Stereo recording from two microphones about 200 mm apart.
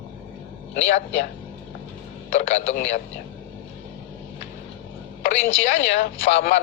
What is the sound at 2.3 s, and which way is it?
Speech, 40° left (ahead or behind).